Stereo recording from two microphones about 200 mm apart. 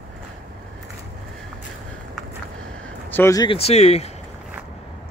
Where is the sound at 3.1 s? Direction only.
15° left (ahead or behind); by 4.0 s 30° left (ahead or behind).